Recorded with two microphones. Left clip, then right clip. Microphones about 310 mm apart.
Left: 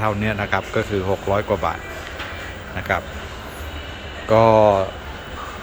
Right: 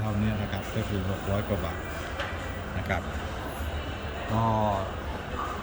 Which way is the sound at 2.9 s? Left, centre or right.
Centre.